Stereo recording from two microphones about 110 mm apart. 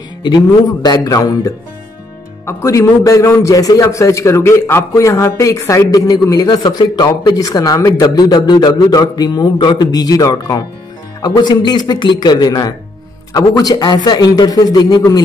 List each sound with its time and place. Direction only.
0.2 s a man's voice: 40° left (ahead or behind)